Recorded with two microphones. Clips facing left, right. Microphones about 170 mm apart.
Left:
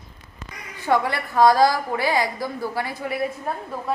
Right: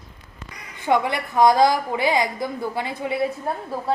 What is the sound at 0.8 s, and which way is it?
A woman's voice, 20° right (ahead or behind).